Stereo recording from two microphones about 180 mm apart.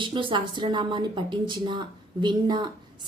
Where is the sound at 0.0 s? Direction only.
25° right (ahead or behind).